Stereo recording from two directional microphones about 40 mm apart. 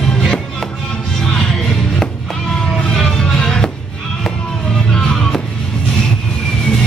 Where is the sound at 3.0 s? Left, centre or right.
Centre.